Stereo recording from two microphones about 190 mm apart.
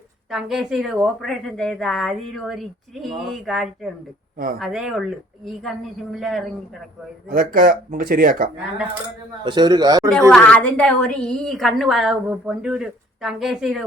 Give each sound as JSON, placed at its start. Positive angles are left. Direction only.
{"t": 0.3, "sound": "a woman's voice", "side_deg": 0}
{"t": 7.3, "sound": "speech", "side_deg": -45}
{"t": 9.4, "sound": "a man's voice", "side_deg": -25}
{"t": 10.1, "sound": "a woman's voice", "side_deg": 0}